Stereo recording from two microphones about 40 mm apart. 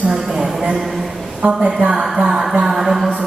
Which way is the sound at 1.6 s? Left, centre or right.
Right.